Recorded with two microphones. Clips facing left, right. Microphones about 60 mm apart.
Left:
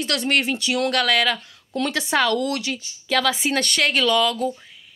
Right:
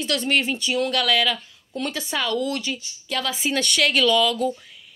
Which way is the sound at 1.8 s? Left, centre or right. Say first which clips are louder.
Left 6 dB; left.